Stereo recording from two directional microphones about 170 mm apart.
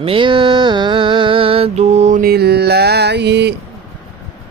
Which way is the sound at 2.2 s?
70° right (ahead or behind).